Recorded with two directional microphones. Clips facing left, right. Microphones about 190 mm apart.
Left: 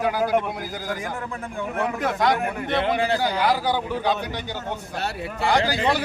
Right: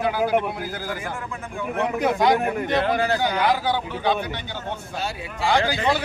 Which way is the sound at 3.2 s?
5° left (ahead or behind).